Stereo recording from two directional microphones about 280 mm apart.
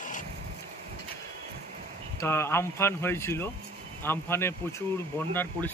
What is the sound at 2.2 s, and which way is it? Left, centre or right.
Speech, centre.